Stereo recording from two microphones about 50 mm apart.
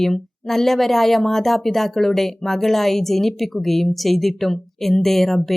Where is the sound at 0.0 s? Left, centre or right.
Centre.